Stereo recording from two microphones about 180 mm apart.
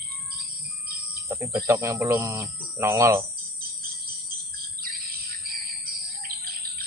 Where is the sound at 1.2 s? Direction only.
20° right (ahead or behind).